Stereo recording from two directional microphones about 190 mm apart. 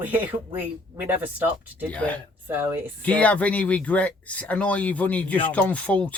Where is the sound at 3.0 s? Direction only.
5° left (ahead or behind).